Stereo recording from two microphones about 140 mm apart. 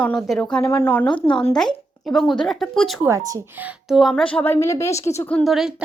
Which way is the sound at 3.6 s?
Centre (ahead or behind).